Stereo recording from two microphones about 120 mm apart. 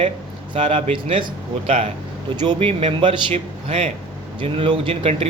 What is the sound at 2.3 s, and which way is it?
Speech, 35° right (ahead or behind).